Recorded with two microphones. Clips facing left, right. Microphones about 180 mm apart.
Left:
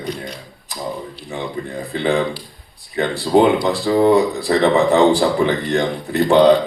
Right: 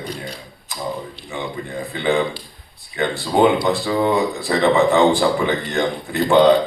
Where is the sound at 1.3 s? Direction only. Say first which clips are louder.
Left 1 dB; 35° left (ahead or behind).